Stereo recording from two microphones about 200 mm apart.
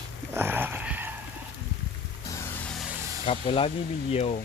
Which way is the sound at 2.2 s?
15° left (ahead or behind).